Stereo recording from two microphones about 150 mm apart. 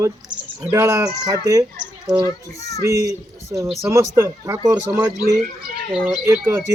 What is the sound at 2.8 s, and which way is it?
Speech, 20° right (ahead or behind).